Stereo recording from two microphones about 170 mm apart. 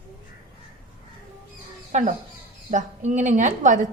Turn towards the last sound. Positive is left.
turn(degrees=-50)  # may be behind; listen again after turning